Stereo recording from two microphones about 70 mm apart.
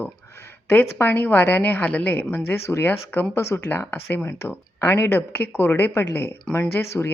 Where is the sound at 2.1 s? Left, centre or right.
Left.